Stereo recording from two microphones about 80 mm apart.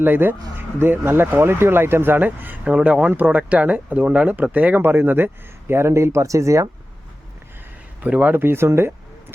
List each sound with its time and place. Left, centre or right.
0.0 s speech: right
8.0 s speech: centre